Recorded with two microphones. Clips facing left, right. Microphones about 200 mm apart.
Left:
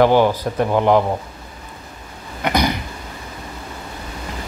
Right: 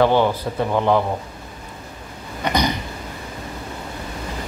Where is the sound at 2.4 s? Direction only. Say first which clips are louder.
Left 2 dB; 10° left (ahead or behind).